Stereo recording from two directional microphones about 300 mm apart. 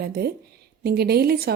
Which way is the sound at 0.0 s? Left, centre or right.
Right.